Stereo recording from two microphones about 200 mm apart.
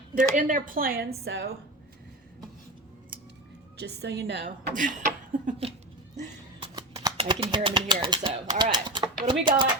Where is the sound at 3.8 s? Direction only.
60° right (ahead or behind).